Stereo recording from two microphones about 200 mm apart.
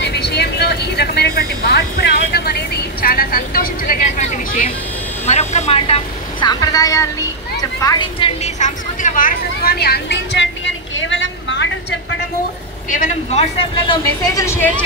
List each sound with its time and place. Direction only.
0.0 s vehicle: 55° left (ahead or behind); by 4.6 s 40° left (ahead or behind)
5.2 s speech: 35° left (ahead or behind)
8.5 s speech: 40° left (ahead or behind); by 11.7 s 65° left (ahead or behind)
12.9 s speech: 35° left (ahead or behind); by 14.7 s 15° left (ahead or behind)